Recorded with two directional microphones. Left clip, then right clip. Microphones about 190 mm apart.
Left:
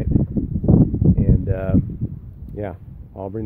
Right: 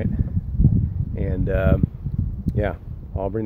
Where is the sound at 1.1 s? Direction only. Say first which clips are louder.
Even; 25° left (ahead or behind).